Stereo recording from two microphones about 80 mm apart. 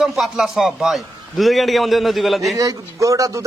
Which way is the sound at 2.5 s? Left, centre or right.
Right.